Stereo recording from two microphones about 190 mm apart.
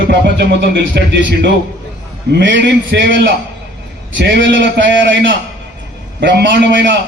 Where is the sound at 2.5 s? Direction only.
70° right (ahead or behind).